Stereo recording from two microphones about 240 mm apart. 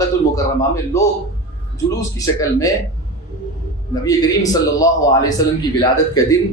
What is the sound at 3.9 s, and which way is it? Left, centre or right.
Speech, centre.